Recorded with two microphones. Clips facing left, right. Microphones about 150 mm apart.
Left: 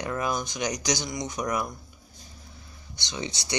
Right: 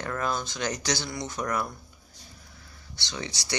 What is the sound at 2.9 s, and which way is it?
Speech, 20° left (ahead or behind).